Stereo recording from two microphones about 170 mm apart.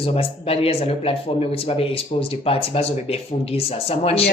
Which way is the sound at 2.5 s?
35° left (ahead or behind).